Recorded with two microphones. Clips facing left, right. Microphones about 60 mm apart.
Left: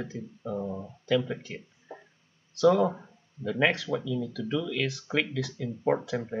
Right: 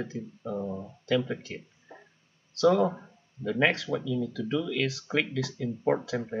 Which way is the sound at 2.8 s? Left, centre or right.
Centre.